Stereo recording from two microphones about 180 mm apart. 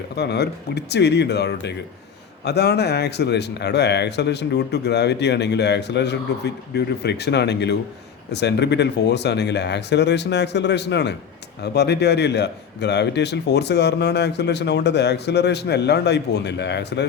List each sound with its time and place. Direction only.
0.2 s a man's voice: 70° left (ahead or behind)